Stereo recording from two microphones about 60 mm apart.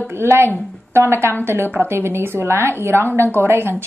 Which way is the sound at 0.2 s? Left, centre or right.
Right.